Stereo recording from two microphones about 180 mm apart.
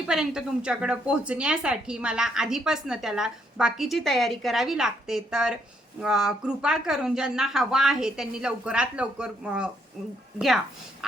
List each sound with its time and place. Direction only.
0.1 s a woman's voice: 5° right (ahead or behind)